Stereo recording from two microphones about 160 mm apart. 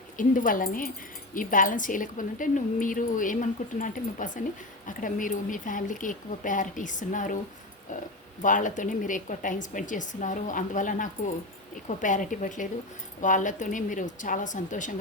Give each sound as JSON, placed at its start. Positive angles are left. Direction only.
{"t": 0.2, "sound": "speech", "side_deg": 55}
{"t": 8.4, "sound": "a woman's voice", "side_deg": 55}